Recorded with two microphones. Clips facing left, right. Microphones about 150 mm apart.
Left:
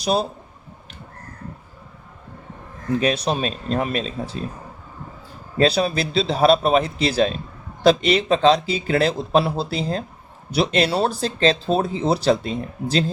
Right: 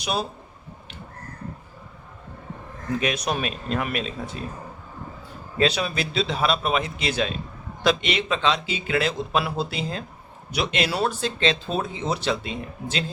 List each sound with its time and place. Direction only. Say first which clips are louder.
0.0 s speech: left 6 dB; 30° left (ahead or behind)
3.0 s speech: left 4 dB; 30° left (ahead or behind)
5.5 s speech: left 5 dB; 35° left (ahead or behind)